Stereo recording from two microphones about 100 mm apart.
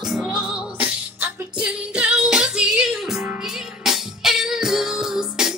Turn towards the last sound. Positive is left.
turn(degrees=-5)  # may be behind; listen again after turning